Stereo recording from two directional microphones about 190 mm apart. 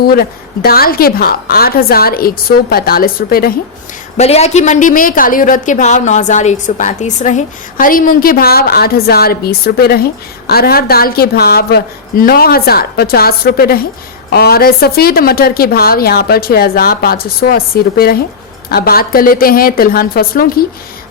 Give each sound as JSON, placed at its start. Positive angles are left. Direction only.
{"t": 0.1, "sound": "speech", "side_deg": 55}
{"t": 4.2, "sound": "speech", "side_deg": 35}